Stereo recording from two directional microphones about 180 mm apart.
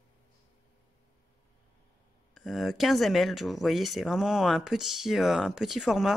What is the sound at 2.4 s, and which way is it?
Speech, centre (ahead or behind).